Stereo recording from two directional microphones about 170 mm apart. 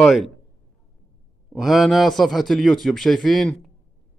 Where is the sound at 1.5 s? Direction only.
Centre (ahead or behind).